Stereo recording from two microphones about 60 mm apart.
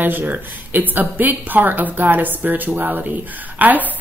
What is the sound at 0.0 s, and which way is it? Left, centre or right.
A woman's voice, right.